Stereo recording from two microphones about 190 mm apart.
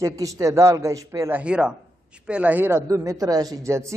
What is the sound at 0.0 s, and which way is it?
Speech, 15° right (ahead or behind).